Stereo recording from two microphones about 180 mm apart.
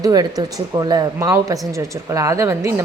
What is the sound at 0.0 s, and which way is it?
Speech, 20° right (ahead or behind).